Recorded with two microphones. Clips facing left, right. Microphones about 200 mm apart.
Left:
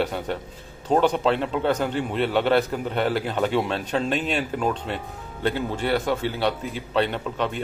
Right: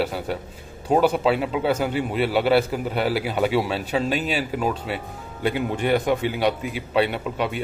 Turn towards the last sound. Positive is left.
turn(degrees=-10)  # may be behind; listen again after turning